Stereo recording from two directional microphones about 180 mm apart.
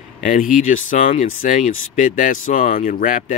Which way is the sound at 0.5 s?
45° left (ahead or behind).